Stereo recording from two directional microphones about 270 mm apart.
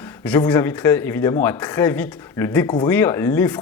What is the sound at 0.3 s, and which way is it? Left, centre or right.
Speech, centre.